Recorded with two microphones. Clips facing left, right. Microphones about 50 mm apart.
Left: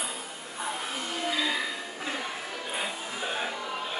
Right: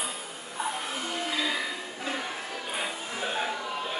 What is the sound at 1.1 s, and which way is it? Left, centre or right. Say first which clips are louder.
Music: left 1 dB; centre.